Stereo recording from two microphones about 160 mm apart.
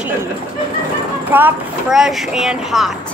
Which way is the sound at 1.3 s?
10° right (ahead or behind).